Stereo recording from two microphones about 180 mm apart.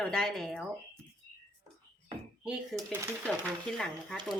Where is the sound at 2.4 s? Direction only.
5° right (ahead or behind).